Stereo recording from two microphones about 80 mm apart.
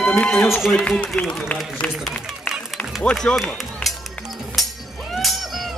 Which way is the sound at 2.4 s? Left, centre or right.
Centre.